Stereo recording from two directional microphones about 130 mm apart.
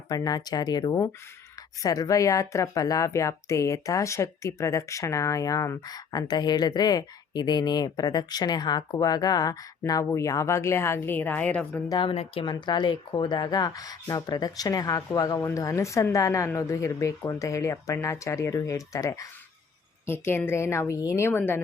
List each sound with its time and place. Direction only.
0.1 s speech: 30° left (ahead or behind); by 11.8 s 10° left (ahead or behind)
11.9 s speech: 35° left (ahead or behind)
12.1 s speech: 50° left (ahead or behind); by 21.6 s 15° left (ahead or behind)